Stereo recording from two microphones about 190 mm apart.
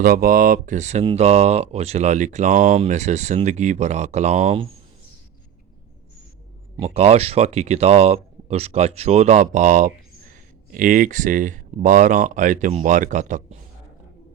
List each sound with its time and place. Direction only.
0.0 s speech: 50° right (ahead or behind); by 4.7 s 30° right (ahead or behind)
6.7 s speech: 30° right (ahead or behind)